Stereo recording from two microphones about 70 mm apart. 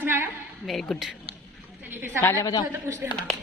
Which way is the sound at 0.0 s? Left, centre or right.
Right.